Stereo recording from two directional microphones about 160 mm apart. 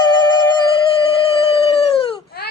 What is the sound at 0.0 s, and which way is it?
Music, 25° left (ahead or behind).